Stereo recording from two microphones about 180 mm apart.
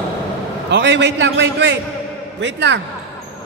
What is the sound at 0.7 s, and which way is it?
A man's voice, 75° right (ahead or behind).